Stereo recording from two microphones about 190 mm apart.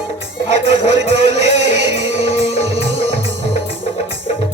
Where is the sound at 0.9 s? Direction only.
65° right (ahead or behind).